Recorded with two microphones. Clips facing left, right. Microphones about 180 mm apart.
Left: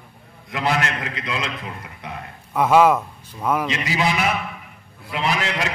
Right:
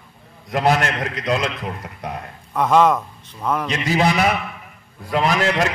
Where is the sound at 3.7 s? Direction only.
45° right (ahead or behind).